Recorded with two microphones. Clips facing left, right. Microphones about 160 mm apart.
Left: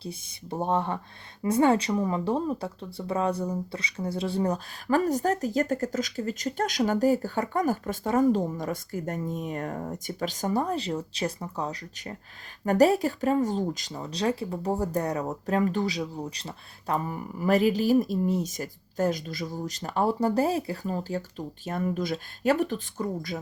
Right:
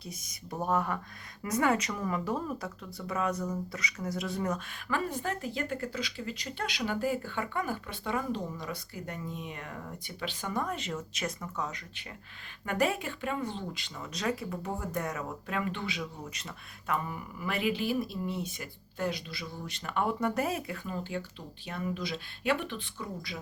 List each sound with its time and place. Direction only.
0.0 s speech: 30° left (ahead or behind); by 23.4 s 45° left (ahead or behind)